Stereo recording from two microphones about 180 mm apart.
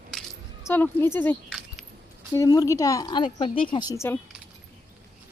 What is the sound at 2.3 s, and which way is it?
Speech, 20° left (ahead or behind).